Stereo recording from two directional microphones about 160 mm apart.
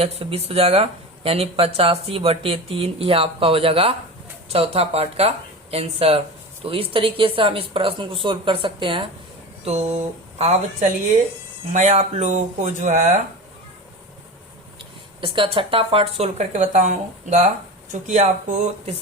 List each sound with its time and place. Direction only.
0.0 s speech: 40° right (ahead or behind)
9.6 s speech: 45° right (ahead or behind)
15.2 s speech: 35° right (ahead or behind)